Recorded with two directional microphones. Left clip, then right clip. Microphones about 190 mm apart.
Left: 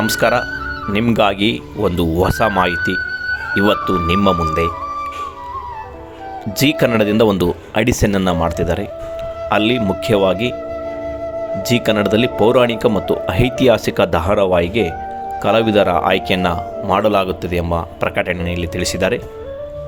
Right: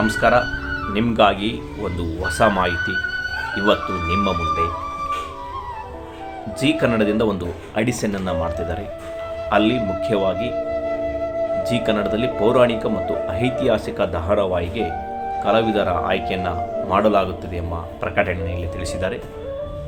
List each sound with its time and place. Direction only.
0.0 s speech: 50° left (ahead or behind)
6.6 s speech: 50° left (ahead or behind)
11.6 s speech: 50° left (ahead or behind)